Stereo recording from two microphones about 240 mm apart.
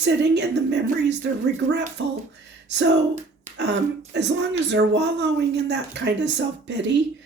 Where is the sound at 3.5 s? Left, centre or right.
Right.